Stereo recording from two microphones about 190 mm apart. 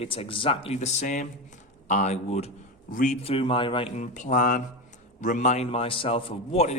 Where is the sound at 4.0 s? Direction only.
40° left (ahead or behind).